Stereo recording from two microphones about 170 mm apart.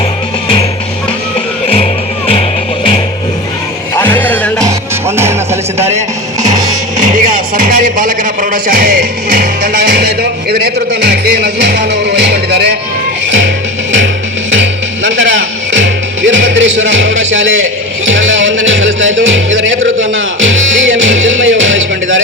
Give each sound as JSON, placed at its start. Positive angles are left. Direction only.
{"t": 1.7, "sound": "music", "side_deg": 35}
{"t": 3.9, "sound": "music", "side_deg": 10}
{"t": 4.6, "sound": "music", "side_deg": -15}
{"t": 7.0, "sound": "speech", "side_deg": -50}
{"t": 9.9, "sound": "music", "side_deg": -70}
{"t": 15.1, "sound": "a sound", "side_deg": -90}
{"t": 16.2, "sound": "music", "side_deg": -90}